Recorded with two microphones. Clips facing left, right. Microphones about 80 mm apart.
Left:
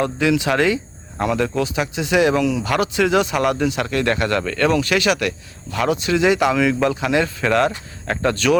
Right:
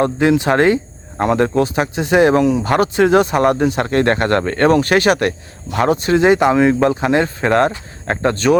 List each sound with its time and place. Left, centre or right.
0.0 s speech: right